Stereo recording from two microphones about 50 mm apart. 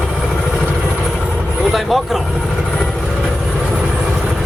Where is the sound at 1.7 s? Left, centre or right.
Centre.